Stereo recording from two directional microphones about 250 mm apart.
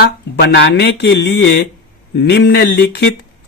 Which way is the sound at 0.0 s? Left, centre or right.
Left.